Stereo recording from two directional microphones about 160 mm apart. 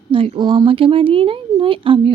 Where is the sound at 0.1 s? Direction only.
30° right (ahead or behind).